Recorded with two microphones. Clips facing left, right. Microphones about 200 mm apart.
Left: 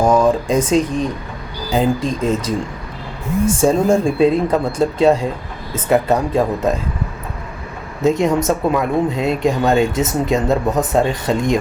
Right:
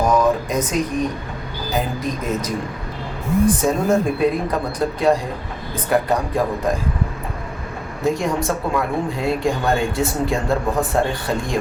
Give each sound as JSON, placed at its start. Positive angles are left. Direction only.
{"t": 0.0, "sound": "a sound", "side_deg": 30}
{"t": 1.7, "sound": "speech", "side_deg": 30}
{"t": 3.6, "sound": "speech", "side_deg": 30}
{"t": 8.0, "sound": "speech", "side_deg": 20}